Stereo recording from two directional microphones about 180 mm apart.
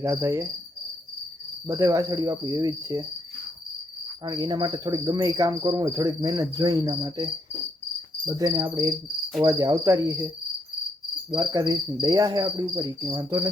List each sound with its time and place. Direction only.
0.0 s cricket: 15° right (ahead or behind)
1.6 s cricket: 15° right (ahead or behind)
4.3 s cricket: 25° right (ahead or behind)
11.3 s cricket: 25° right (ahead or behind)